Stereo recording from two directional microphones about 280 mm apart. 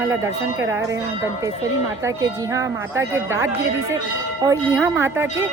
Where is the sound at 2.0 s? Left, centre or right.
Centre.